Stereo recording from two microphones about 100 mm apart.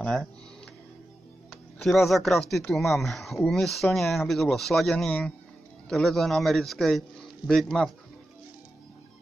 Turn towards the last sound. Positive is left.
turn(degrees=5)  # may be behind; listen again after turning